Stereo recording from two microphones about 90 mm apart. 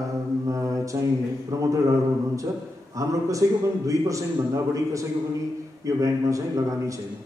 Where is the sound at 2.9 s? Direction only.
35° right (ahead or behind).